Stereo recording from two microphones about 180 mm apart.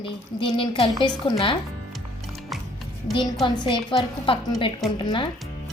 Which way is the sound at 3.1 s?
25° left (ahead or behind).